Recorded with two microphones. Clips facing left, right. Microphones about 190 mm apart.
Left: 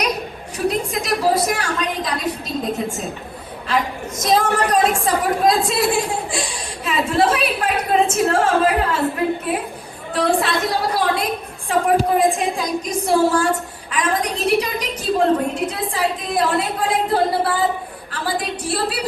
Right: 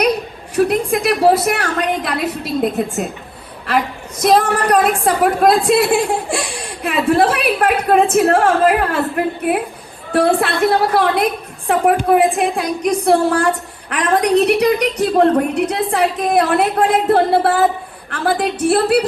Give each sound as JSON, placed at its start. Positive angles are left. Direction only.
{"t": 0.5, "sound": "a woman's voice", "side_deg": -60}
{"t": 4.2, "sound": "a woman's voice", "side_deg": -60}